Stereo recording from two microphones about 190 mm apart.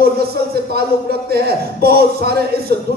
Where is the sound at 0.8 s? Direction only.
55° right (ahead or behind).